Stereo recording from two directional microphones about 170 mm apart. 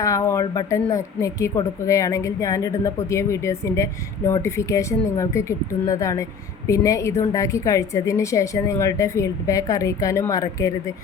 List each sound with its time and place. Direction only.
0.0 s a woman's voice: 20° left (ahead or behind)